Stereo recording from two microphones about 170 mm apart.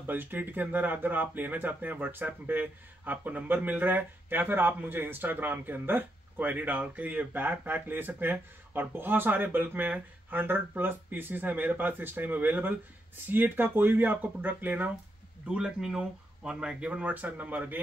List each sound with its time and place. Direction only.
0.0 s speech: 10° right (ahead or behind)